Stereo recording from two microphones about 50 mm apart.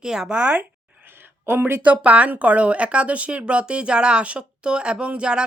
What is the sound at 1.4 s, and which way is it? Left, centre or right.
Speech, right.